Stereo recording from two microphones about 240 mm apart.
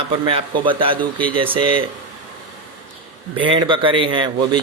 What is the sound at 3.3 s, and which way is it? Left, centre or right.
Speech, right.